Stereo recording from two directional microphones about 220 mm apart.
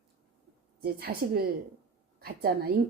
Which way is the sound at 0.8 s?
45° right (ahead or behind).